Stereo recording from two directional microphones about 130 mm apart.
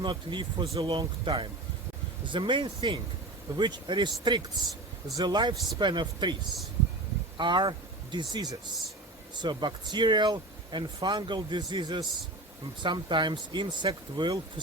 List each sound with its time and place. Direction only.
0.0 s speech: 35° right (ahead or behind)
7.3 s speech: 35° right (ahead or behind)